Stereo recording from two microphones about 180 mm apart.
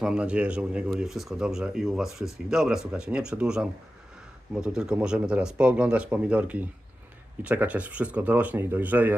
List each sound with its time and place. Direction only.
0.0 s speech: 5° right (ahead or behind)